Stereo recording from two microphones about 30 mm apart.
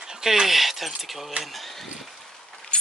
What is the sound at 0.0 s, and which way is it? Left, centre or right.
Speech, centre.